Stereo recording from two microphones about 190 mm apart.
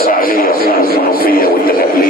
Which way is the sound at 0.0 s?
50° left (ahead or behind).